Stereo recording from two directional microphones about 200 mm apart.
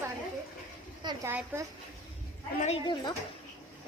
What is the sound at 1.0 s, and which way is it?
Speech, 15° right (ahead or behind).